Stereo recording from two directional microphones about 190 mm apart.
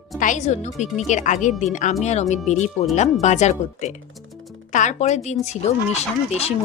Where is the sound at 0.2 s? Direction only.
40° left (ahead or behind).